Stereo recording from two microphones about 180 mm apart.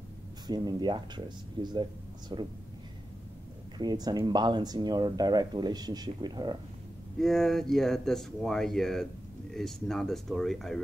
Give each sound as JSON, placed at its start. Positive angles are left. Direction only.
{"t": 0.5, "sound": "speech", "side_deg": -25}
{"t": 3.7, "sound": "speech", "side_deg": -25}
{"t": 7.2, "sound": "speech", "side_deg": 0}